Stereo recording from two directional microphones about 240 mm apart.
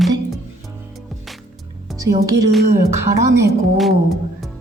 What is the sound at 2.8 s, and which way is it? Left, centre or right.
Speech, centre.